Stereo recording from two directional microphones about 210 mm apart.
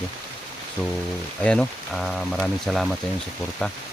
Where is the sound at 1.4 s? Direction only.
5° left (ahead or behind).